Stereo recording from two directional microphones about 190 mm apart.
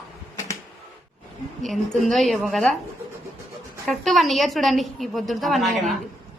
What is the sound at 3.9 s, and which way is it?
A woman's voice, centre (ahead or behind).